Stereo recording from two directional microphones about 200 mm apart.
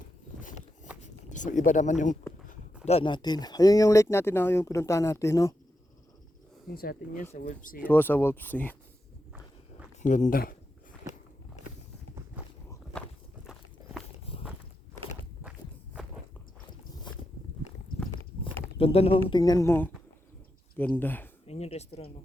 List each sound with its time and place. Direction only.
1.0 s speech: 40° left (ahead or behind); by 5.5 s 15° left (ahead or behind)
6.7 s speech: 45° left (ahead or behind)
7.8 s speech: 10° left (ahead or behind)
10.0 s speech: 40° left (ahead or behind)
12.4 s walk: 5° right (ahead or behind)
14.3 s walk: 25° left (ahead or behind)
18.8 s speech: 30° left (ahead or behind); by 21.2 s 10° left (ahead or behind)
21.4 s speech: 30° left (ahead or behind)